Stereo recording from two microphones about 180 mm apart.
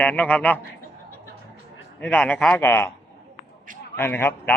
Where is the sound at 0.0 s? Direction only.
10° left (ahead or behind).